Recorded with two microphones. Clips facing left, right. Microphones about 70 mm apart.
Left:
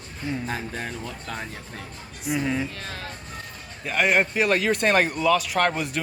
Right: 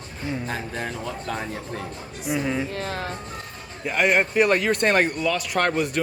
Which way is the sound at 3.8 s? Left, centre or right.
Centre.